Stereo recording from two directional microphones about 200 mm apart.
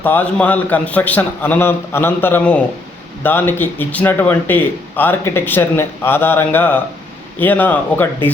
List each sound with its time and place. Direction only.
0.0 s a man's voice: 10° left (ahead or behind)